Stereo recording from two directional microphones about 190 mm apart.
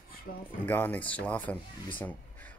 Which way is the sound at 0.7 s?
10° left (ahead or behind).